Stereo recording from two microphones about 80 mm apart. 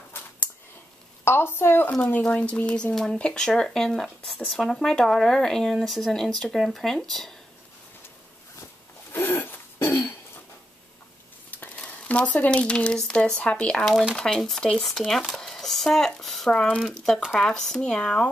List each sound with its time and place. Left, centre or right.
1.2 s a woman's voice: left; by 7.3 s centre
9.1 s a sound: left
11.5 s speech: centre